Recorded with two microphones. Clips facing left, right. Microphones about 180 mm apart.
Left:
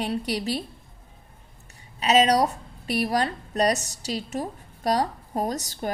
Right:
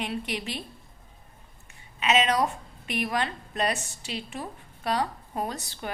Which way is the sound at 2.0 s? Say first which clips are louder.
Left 4 dB; 40° left (ahead or behind).